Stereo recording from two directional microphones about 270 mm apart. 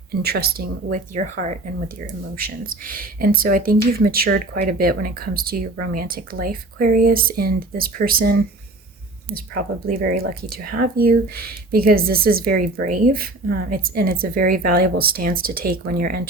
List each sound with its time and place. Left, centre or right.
0.1 s speech: right
9.8 s speech: right